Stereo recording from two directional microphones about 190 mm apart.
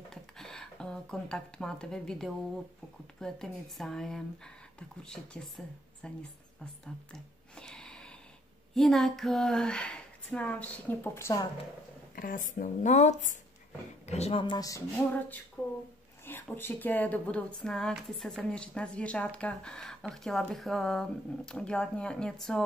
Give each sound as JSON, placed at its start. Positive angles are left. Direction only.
{"t": 0.1, "sound": "speech", "side_deg": 5}
{"t": 6.6, "sound": "a sound", "side_deg": 5}
{"t": 8.7, "sound": "speech", "side_deg": 0}
{"t": 12.2, "sound": "speech", "side_deg": 45}
{"t": 16.3, "sound": "speech", "side_deg": 10}